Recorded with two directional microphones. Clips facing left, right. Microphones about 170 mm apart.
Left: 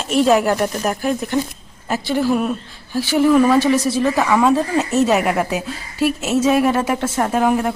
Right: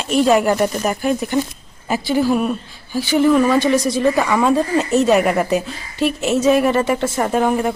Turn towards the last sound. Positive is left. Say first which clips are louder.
# even
turn(degrees=0)  # may be behind; listen again after turning